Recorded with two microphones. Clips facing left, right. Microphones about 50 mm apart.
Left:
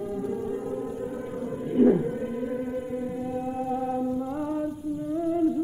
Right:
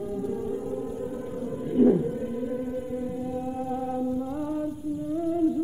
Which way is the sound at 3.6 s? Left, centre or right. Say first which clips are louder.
Left 3 dB; left.